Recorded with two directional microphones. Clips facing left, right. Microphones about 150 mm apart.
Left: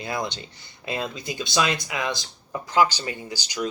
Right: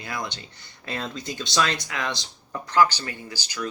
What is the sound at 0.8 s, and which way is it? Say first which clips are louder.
Speech: left 2 dB; 15° left (ahead or behind).